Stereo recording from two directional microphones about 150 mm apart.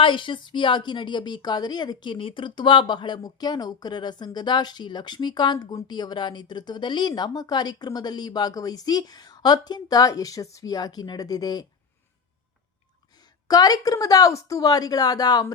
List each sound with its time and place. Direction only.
0.0 s a woman's voice: 35° left (ahead or behind)
13.5 s a woman's voice: 25° left (ahead or behind)